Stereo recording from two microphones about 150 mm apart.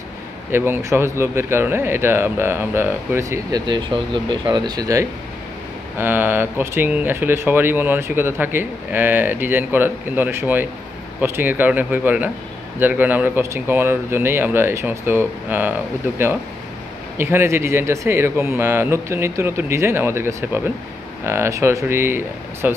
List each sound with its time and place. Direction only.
0.5 s speech: 15° right (ahead or behind)
5.9 s speech: 15° right (ahead or behind)
17.2 s speech: 15° right (ahead or behind)